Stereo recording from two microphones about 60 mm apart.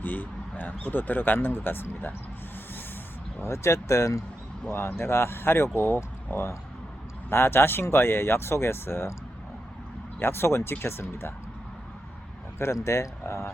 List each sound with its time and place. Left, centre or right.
0.0 s speech: left
3.4 s speech: left
4.7 s speech: left
6.3 s speech: left
7.3 s speech: left
10.2 s speech: left
12.5 s speech: left